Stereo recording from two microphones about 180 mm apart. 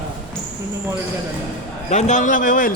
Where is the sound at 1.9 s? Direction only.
40° left (ahead or behind).